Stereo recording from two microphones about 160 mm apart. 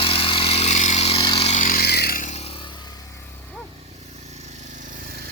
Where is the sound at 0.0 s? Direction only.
35° left (ahead or behind).